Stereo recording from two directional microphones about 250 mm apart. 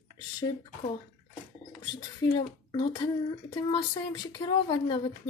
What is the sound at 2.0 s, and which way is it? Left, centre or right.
A child's voice, centre.